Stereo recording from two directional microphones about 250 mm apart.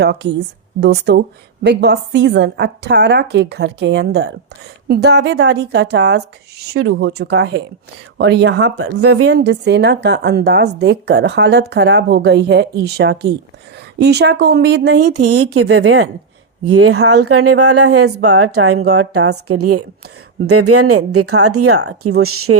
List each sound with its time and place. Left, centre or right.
0.0 s a woman's voice: right
15.0 s a woman's voice: right
15.6 s a woman's voice: right